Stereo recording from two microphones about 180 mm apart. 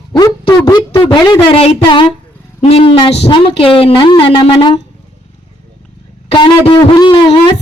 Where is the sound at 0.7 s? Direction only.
25° left (ahead or behind).